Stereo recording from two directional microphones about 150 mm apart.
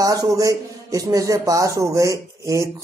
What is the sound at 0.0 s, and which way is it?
Speech, 25° right (ahead or behind).